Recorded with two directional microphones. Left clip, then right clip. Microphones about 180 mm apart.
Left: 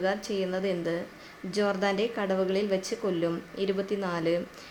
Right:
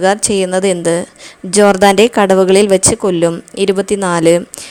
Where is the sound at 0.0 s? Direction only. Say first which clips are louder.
Right 17 dB; 55° right (ahead or behind).